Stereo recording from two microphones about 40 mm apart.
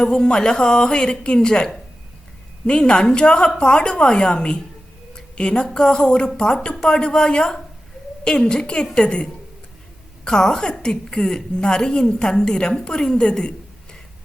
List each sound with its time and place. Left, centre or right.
0.0 s a woman's voice: left
5.1 s a sound: left
5.7 s a woman's voice: centre
10.2 s a woman's voice: centre